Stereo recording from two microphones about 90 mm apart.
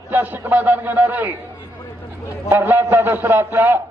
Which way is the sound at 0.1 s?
20° right (ahead or behind).